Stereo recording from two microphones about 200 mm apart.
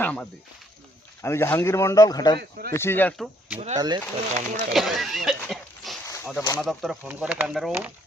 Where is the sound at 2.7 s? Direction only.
10° left (ahead or behind).